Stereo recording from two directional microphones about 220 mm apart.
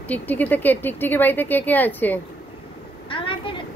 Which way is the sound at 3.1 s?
25° left (ahead or behind).